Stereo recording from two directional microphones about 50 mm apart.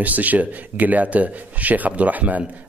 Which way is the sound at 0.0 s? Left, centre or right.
Right.